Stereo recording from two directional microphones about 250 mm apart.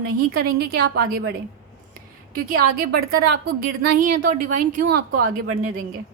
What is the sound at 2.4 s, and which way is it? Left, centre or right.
A woman's voice, right.